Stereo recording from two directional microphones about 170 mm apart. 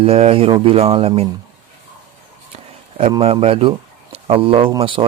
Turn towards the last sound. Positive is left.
turn(degrees=-30)  # may be behind; listen again after turning